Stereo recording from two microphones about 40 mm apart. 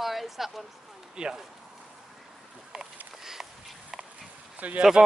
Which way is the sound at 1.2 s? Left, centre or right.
Right.